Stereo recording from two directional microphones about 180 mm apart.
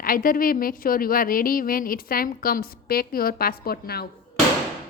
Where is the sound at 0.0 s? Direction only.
50° left (ahead or behind).